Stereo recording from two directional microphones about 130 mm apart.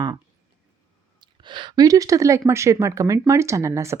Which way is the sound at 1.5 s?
35° right (ahead or behind).